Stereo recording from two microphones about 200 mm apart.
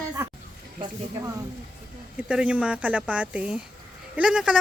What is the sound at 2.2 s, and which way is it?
A man's voice, 5° right (ahead or behind).